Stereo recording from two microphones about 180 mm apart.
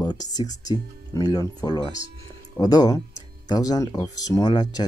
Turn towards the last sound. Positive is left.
turn(degrees=25)  # may be behind; listen again after turning